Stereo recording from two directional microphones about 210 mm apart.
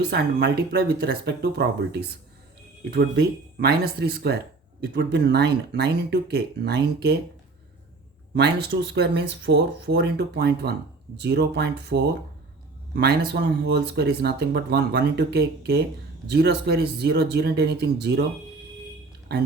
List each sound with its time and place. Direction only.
0.1 s speech: 50° right (ahead or behind)
8.4 s speech: 50° right (ahead or behind)